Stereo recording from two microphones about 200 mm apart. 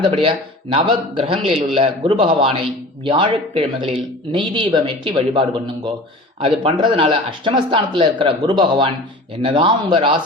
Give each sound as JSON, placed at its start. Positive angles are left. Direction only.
{"t": 0.2, "sound": "speech", "side_deg": -25}